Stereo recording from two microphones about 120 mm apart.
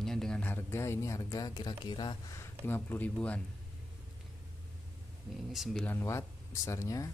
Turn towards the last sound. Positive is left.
turn(degrees=25)  # may be behind; listen again after turning